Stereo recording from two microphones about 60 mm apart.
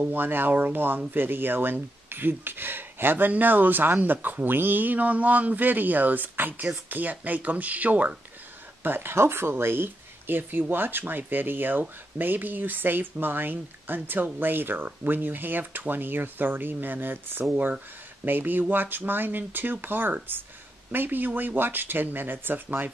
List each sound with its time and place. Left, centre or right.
0.1 s speech: right
8.8 s speech: right